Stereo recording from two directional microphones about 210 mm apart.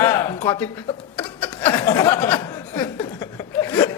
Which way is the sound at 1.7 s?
15° left (ahead or behind).